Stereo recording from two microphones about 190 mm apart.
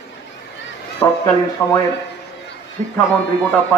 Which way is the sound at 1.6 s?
15° left (ahead or behind).